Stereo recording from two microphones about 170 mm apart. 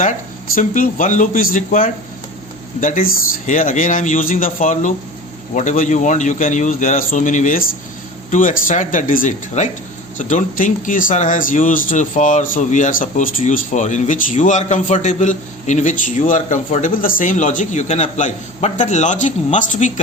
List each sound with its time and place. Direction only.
0.0 s speech: 50° left (ahead or behind)